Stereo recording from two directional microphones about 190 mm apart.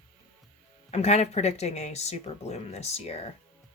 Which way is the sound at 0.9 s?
35° left (ahead or behind).